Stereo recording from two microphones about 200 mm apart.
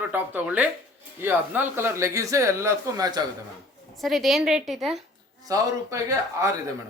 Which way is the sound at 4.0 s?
Centre (ahead or behind).